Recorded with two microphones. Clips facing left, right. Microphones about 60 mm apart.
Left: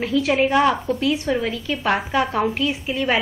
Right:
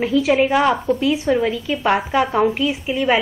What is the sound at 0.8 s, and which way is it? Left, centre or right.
Speech, right.